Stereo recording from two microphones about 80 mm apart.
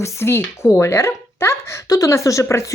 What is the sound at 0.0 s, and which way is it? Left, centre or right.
Speech, left.